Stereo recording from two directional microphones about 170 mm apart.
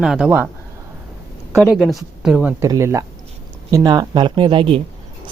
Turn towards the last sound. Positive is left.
turn(degrees=-30)  # may be behind; listen again after turning